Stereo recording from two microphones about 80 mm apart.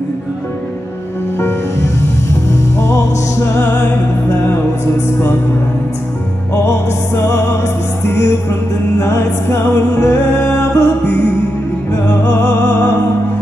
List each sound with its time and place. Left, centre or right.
2.5 s music: left
7.2 s music: left
12.4 s music: left